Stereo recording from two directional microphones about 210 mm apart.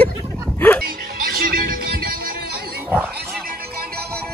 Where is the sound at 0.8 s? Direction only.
45° right (ahead or behind).